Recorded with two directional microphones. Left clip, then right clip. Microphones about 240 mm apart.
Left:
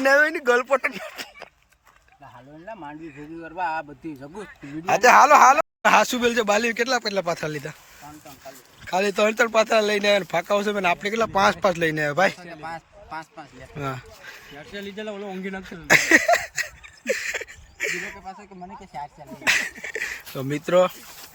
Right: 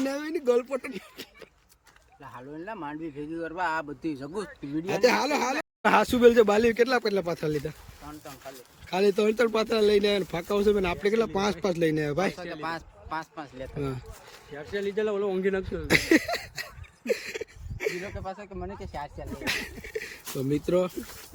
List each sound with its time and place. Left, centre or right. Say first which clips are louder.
0.0 s speech: left 11 dB; centre
2.2 s speech: right 1 dB; centre
4.9 s speech: left 10 dB; centre
8.9 s speech: left 3 dB; centre
12.6 s speech: left 1 dB; right
13.7 s speech: left 4 dB; centre
14.6 s speech: right 6 dB; centre
15.6 s a sound: left 7 dB; centre
19.5 s a sound: left 10 dB; centre
20.5 s speech: left 7 dB; centre